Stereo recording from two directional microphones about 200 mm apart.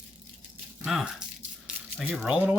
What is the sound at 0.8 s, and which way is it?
Speech, centre (ahead or behind).